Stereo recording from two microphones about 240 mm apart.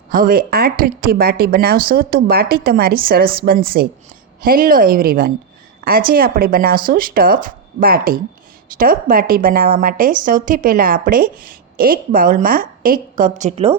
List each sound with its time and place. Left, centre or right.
0.1 s a woman's voice: right